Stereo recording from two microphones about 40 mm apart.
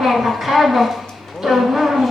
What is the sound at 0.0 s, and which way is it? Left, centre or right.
Speech, centre.